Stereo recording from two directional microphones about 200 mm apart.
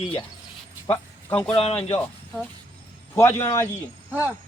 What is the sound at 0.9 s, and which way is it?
Speech, 10° left (ahead or behind).